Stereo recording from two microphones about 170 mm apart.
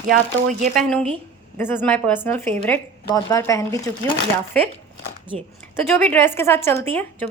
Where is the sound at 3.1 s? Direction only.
20° left (ahead or behind).